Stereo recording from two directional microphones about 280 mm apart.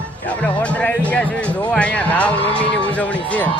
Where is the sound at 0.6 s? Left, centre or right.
Centre.